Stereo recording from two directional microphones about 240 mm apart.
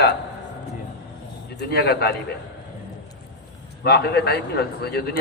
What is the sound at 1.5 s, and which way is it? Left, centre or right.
Speech, left.